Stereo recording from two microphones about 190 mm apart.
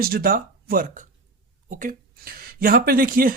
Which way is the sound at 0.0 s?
50° right (ahead or behind).